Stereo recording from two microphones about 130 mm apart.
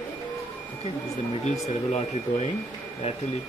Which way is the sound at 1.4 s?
55° left (ahead or behind).